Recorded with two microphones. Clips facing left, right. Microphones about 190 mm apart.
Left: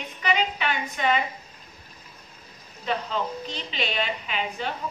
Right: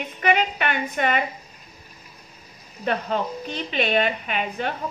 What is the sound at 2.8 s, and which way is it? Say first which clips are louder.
A woman's voice: right 3 dB; 55° right (ahead or behind).